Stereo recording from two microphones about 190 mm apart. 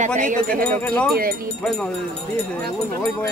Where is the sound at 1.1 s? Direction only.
50° right (ahead or behind).